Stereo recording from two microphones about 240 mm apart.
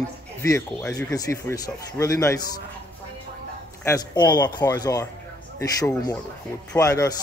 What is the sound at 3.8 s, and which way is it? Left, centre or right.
Speech, centre.